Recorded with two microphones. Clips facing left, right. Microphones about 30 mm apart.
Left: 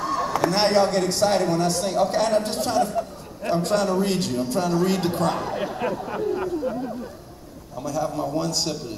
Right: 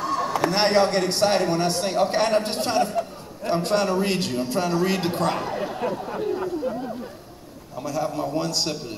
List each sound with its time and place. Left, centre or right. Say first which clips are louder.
0.0 s a sound: even; centre
0.7 s a man's voice: even; right
3.6 s a man's voice: even; right
5.9 s speech: left 1 dB; centre
7.8 s a man's voice: even; right